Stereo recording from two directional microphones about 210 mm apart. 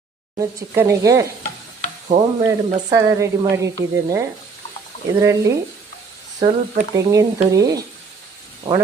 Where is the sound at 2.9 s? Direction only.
15° right (ahead or behind).